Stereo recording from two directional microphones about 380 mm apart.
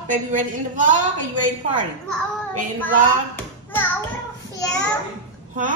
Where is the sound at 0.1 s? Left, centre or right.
Centre.